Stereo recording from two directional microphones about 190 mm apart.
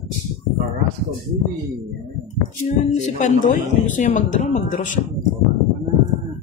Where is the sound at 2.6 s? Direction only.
40° left (ahead or behind).